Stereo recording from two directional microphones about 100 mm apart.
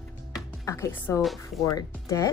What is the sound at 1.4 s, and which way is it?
Speech, 30° left (ahead or behind).